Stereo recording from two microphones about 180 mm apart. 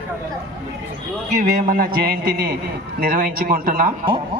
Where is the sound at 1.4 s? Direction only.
50° right (ahead or behind).